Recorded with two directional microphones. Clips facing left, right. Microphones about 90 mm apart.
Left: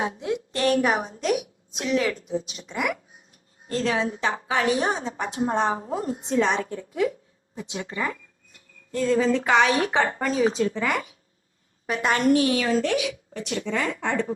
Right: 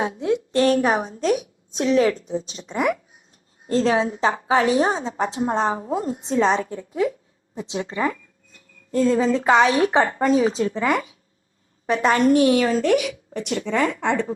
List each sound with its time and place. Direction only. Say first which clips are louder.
0.2 s a woman's voice: right 6 dB; 30° right (ahead or behind)
12.4 s a woman's voice: right 5 dB; 45° right (ahead or behind)